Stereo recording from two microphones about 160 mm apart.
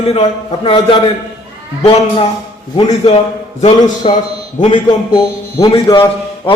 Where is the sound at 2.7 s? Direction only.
35° left (ahead or behind).